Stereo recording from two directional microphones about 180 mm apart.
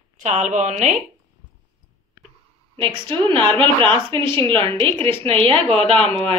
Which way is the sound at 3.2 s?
30° right (ahead or behind).